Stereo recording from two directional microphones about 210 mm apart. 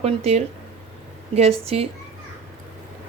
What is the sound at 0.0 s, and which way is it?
Speech, 30° right (ahead or behind).